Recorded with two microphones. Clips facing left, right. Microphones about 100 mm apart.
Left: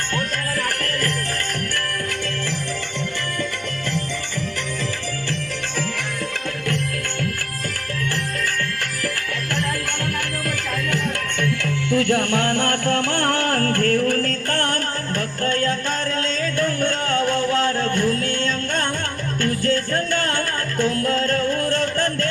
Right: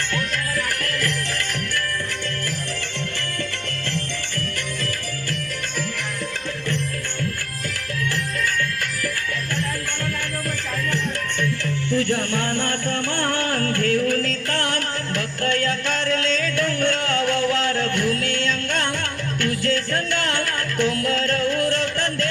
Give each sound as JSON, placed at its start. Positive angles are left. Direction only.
{"t": 11.3, "sound": "music", "side_deg": 70}